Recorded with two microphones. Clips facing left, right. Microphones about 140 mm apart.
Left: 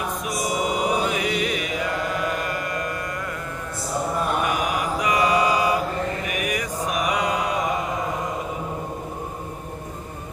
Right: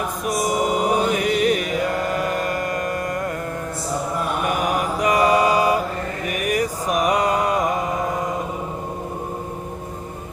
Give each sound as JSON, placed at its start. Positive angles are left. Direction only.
{"t": 0.4, "sound": "mantra", "side_deg": -45}
{"t": 4.4, "sound": "mantra", "side_deg": -45}
{"t": 6.2, "sound": "a sound", "side_deg": -45}
{"t": 6.9, "sound": "mantra", "side_deg": -45}